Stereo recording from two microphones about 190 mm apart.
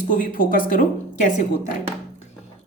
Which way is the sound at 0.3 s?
45° left (ahead or behind).